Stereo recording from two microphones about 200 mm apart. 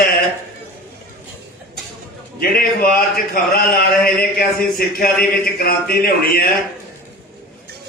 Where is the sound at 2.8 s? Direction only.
50° left (ahead or behind).